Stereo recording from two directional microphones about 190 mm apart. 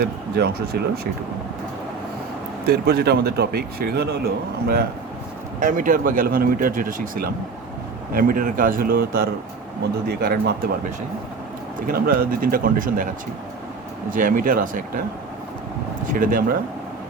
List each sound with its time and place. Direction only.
0.0 s speech: 55° right (ahead or behind)
2.6 s speech: 55° right (ahead or behind)
5.5 s speech: 45° right (ahead or behind)
11.9 s speech: 50° right (ahead or behind)
14.1 s speech: 45° right (ahead or behind)
16.0 s speech: 45° right (ahead or behind)